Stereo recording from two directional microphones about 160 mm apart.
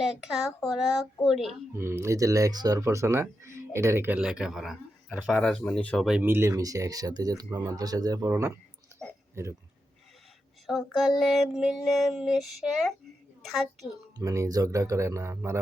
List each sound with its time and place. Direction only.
0.0 s child singing: centre (ahead or behind)
1.7 s speech: 15° right (ahead or behind); by 6.1 s 5° left (ahead or behind)
6.1 s speech: 10° right (ahead or behind)
8.9 s a sound: 15° right (ahead or behind)
9.3 s speech: 15° right (ahead or behind)
10.7 s child singing: centre (ahead or behind)
13.4 s a child's voice: centre (ahead or behind)
14.2 s speech: 20° right (ahead or behind)